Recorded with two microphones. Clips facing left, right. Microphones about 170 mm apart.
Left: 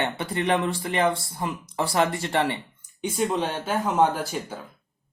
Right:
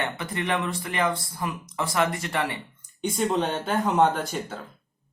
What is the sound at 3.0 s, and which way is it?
Speech, 5° left (ahead or behind).